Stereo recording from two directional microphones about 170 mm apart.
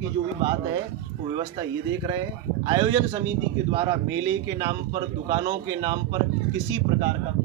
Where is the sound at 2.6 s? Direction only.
25° right (ahead or behind).